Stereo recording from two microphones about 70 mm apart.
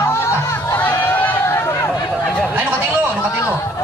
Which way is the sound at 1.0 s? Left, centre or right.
Left.